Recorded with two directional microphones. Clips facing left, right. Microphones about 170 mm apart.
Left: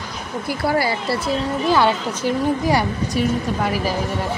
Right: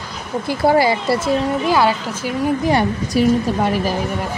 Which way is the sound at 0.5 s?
20° right (ahead or behind).